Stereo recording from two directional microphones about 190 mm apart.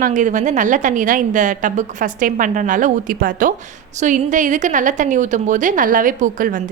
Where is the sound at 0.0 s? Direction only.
40° right (ahead or behind).